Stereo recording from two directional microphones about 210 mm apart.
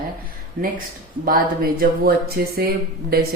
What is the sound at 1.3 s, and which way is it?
Speech, 45° right (ahead or behind).